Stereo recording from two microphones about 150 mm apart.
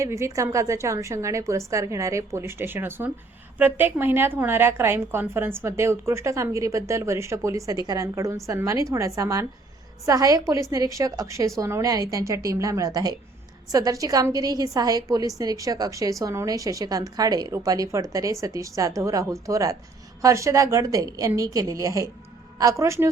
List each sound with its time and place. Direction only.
0.0 s a woman's voice: 20° right (ahead or behind)